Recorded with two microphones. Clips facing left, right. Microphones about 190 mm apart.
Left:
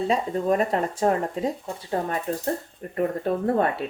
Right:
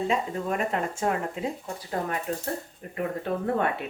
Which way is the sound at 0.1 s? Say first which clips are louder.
Left 5 dB; 35° left (ahead or behind).